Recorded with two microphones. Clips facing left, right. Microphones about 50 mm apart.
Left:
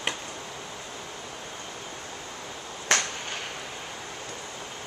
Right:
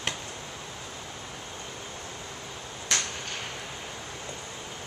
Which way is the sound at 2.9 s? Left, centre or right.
Left.